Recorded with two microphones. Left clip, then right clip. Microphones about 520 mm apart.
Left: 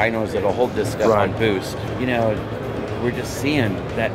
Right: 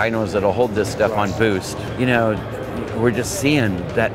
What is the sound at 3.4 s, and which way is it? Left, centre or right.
Speech, right.